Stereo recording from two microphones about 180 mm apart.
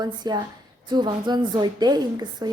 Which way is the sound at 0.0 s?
20° right (ahead or behind).